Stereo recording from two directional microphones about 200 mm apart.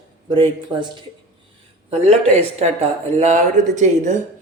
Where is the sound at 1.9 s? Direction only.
30° right (ahead or behind).